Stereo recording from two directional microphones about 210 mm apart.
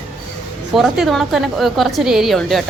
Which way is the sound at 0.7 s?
Centre (ahead or behind).